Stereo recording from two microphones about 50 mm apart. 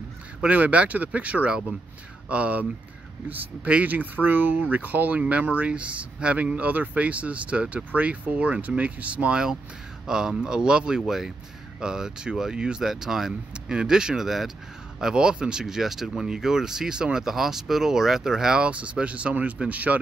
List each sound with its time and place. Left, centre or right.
0.5 s speech: right
3.6 s speech: right
10.0 s speech: centre
15.6 s speech: centre
18.7 s speech: right